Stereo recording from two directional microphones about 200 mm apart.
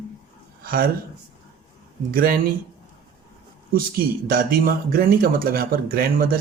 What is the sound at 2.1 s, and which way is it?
Speech, 45° right (ahead or behind).